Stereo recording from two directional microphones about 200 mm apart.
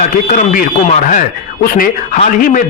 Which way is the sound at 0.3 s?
40° left (ahead or behind).